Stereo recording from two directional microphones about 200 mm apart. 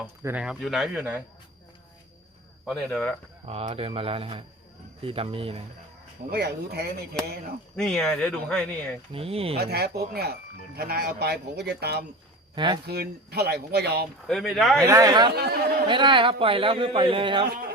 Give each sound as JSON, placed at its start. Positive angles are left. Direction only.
{"t": 0.2, "sound": "speech", "side_deg": -10}
{"t": 2.6, "sound": "speech", "side_deg": 5}
{"t": 3.4, "sound": "speech", "side_deg": -30}
{"t": 6.3, "sound": "speech", "side_deg": -55}
{"t": 7.8, "sound": "speech", "side_deg": 5}
{"t": 9.1, "sound": "speech", "side_deg": -30}
{"t": 9.6, "sound": "speech", "side_deg": -55}
{"t": 12.5, "sound": "speech", "side_deg": -25}
{"t": 12.8, "sound": "speech", "side_deg": -50}
{"t": 14.3, "sound": "speech", "side_deg": 0}
{"t": 14.8, "sound": "speech", "side_deg": -15}
{"t": 15.3, "sound": "speech", "side_deg": -55}
{"t": 15.9, "sound": "speech", "side_deg": -25}